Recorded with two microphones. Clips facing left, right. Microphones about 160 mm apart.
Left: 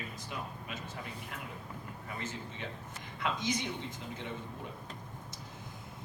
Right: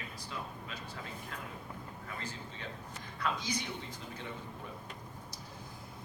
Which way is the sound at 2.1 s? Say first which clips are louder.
Left 5 dB; 20° left (ahead or behind).